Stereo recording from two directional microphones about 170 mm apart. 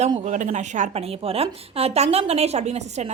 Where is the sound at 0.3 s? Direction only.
45° right (ahead or behind).